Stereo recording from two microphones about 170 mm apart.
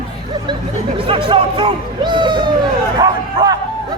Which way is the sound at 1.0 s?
30° right (ahead or behind).